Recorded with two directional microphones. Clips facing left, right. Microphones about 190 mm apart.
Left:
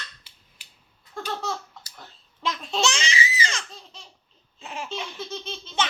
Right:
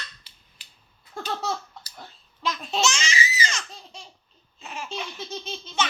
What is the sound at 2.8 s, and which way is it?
Baby laughter, 30° left (ahead or behind).